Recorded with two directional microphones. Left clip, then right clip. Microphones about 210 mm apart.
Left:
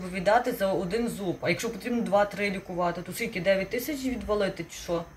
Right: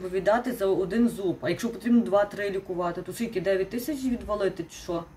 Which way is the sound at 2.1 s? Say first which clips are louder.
Left 4 dB; 15° right (ahead or behind).